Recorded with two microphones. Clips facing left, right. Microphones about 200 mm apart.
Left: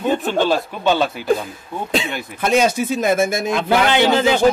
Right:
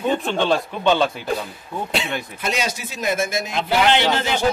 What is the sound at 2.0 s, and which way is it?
Speech, 50° left (ahead or behind).